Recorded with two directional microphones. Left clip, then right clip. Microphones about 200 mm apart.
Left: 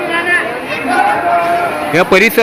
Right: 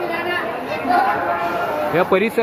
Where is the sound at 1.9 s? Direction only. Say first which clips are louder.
Left 8 dB; 15° left (ahead or behind).